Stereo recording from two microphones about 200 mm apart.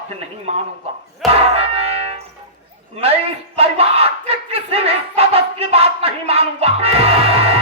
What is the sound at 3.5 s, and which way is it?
Battle cry, 30° right (ahead or behind).